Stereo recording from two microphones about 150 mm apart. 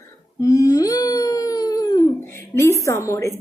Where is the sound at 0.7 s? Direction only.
25° left (ahead or behind).